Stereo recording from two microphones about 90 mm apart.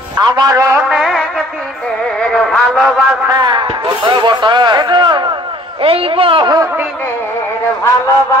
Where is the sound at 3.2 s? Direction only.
50° right (ahead or behind); by 6.5 s 75° right (ahead or behind).